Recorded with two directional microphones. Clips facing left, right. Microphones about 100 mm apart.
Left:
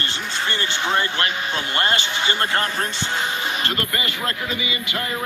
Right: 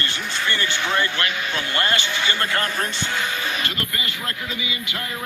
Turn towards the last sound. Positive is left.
turn(degrees=50)  # may be behind; listen again after turning